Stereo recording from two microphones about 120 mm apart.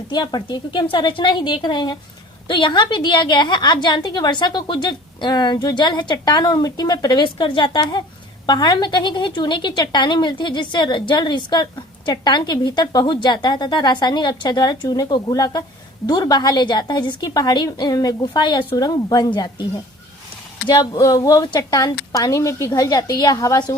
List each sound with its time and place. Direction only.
0.1 s a woman's voice: 35° left (ahead or behind)
20.7 s a woman's voice: 35° left (ahead or behind)